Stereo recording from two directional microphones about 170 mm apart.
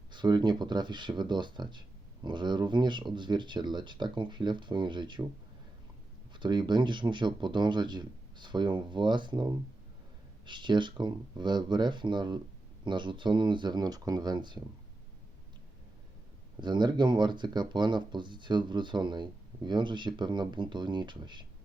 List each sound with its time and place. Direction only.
0.1 s speech: 25° right (ahead or behind)
6.4 s speech: 25° right (ahead or behind)
16.6 s speech: 25° right (ahead or behind)